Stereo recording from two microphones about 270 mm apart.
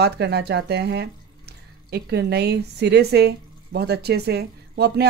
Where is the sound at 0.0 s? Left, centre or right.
Right.